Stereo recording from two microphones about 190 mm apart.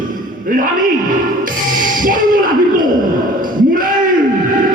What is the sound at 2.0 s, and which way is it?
Music, 45° right (ahead or behind).